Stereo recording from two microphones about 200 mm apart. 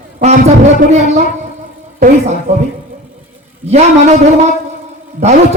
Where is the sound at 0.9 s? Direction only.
35° right (ahead or behind).